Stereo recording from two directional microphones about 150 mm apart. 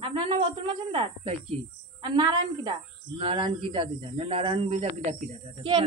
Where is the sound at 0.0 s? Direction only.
35° right (ahead or behind).